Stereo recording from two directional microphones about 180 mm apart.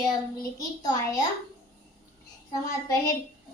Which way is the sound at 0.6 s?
20° left (ahead or behind).